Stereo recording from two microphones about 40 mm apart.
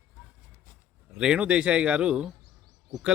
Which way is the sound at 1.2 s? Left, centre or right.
Right.